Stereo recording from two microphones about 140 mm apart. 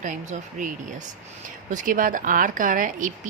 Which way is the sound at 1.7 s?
75° right (ahead or behind).